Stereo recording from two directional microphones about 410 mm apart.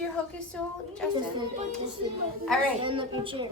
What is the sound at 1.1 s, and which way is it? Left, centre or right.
Speech, centre.